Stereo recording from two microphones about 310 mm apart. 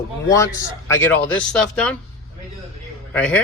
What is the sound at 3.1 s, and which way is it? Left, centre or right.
Speech, centre.